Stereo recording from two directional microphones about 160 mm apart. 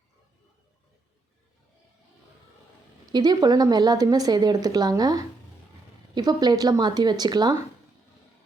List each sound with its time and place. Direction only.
3.1 s a woman's voice: 25° right (ahead or behind)